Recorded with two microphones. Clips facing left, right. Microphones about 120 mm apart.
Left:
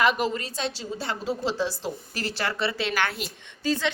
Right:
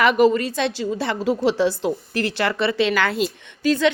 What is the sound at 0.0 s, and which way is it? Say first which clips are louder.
A woman's voice: right 8 dB; 65° right (ahead or behind).